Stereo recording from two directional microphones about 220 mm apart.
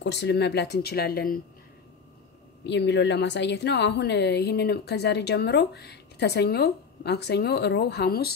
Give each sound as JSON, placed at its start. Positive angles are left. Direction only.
{"t": 0.0, "sound": "a woman's voice", "side_deg": 50}
{"t": 2.6, "sound": "a woman's voice", "side_deg": 50}